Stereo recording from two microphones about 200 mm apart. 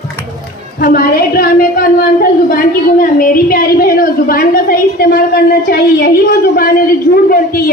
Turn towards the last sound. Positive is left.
turn(degrees=50)  # may be behind; listen again after turning